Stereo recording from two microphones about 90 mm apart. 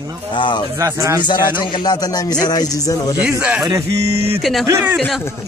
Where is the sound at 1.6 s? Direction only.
50° left (ahead or behind).